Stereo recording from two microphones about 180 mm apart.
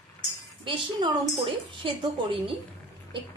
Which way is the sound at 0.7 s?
25° right (ahead or behind).